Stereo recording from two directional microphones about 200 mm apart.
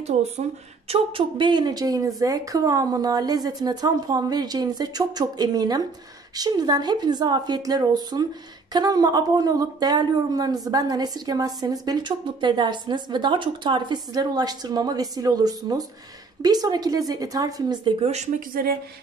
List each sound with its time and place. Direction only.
0.8 s speech: 25° right (ahead or behind); by 18.8 s 45° right (ahead or behind)